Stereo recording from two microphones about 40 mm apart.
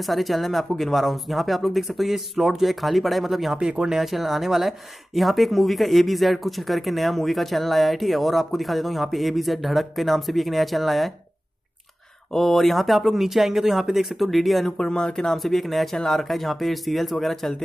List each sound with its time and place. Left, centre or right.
0.1 s speech: centre
3.5 s speech: right
3.9 s speech: centre
12.4 s speech: centre
14.8 s speech: centre
15.3 s speech: centre